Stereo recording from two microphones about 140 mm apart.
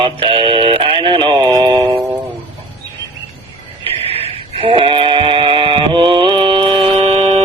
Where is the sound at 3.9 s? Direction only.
45° right (ahead or behind).